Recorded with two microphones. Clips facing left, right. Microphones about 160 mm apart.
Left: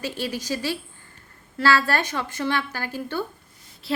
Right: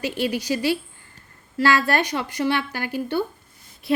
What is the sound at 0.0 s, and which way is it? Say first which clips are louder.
A woman's voice: right 5 dB; 15° right (ahead or behind).